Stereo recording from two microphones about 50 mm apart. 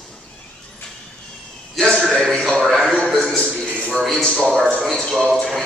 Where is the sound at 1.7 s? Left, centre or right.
Centre.